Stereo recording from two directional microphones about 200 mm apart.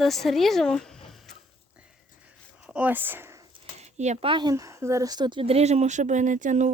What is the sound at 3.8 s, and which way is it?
Speech, 35° right (ahead or behind).